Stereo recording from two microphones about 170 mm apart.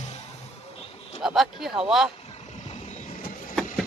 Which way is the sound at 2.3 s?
40° left (ahead or behind).